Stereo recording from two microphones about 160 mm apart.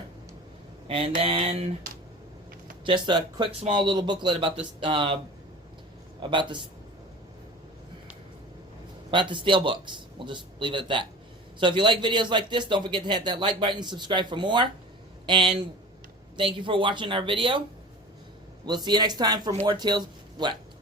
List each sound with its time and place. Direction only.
0.9 s a man's voice: 35° right (ahead or behind)
2.8 s a man's voice: 30° right (ahead or behind)
6.2 s a man's voice: 30° right (ahead or behind)
9.0 s a man's voice: 30° right (ahead or behind)
16.6 s a man's voice: 30° right (ahead or behind)
18.6 s a man's voice: 25° right (ahead or behind)